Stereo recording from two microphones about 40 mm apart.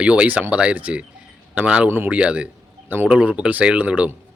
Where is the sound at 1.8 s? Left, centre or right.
Right.